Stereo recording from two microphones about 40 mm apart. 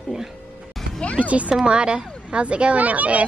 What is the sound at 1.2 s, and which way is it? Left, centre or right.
Speech, right.